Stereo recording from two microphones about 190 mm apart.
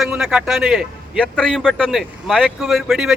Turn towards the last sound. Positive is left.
turn(degrees=0)  # may be behind; listen again after turning